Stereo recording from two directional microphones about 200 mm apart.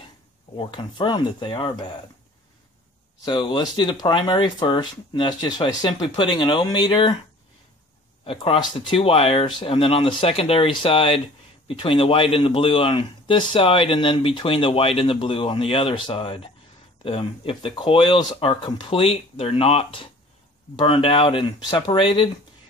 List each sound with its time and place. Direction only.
0.6 s speech: 25° left (ahead or behind)
3.3 s speech: 25° left (ahead or behind)
8.3 s speech: 25° left (ahead or behind)